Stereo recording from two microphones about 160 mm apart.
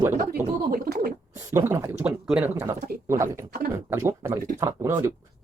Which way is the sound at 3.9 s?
15° right (ahead or behind).